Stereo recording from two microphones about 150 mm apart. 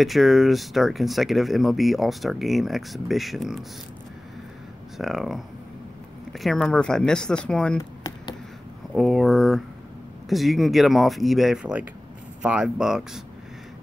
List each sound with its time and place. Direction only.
0.0 s speech: centre (ahead or behind)
4.9 s speech: centre (ahead or behind)
8.9 s speech: centre (ahead or behind)